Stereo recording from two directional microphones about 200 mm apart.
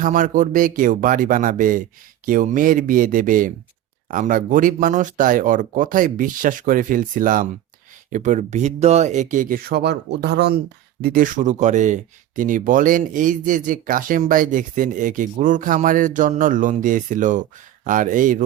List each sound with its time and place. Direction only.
0.0 s speech: 40° right (ahead or behind)